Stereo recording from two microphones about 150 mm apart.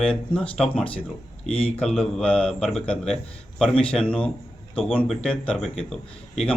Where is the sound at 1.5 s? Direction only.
40° left (ahead or behind).